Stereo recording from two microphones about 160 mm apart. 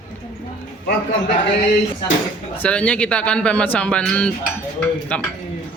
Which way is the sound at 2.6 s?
10° left (ahead or behind).